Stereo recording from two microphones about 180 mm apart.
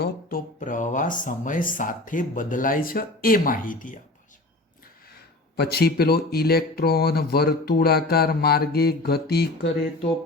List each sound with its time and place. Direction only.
0.0 s speech: 55° left (ahead or behind)
5.1 s speech: 65° left (ahead or behind)